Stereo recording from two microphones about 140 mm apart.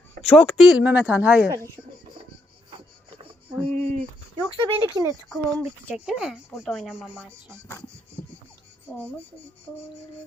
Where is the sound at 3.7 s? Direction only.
55° right (ahead or behind).